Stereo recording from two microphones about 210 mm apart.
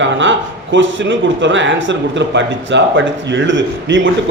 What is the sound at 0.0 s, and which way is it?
A man's voice, 60° right (ahead or behind).